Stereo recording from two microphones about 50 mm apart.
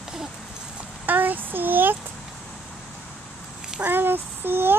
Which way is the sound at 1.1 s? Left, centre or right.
Right.